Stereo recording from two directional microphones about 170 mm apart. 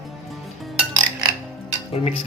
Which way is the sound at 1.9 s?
35° left (ahead or behind).